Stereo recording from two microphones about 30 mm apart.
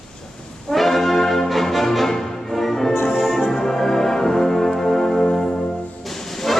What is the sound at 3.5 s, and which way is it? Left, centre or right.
Music, centre.